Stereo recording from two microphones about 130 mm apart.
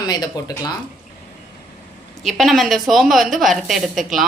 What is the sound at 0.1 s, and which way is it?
Speech, 30° left (ahead or behind).